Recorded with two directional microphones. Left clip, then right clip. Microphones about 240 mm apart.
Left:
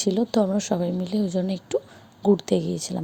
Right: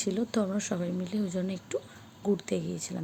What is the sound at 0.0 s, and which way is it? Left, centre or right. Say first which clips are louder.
A woman's voice: left 8 dB; centre.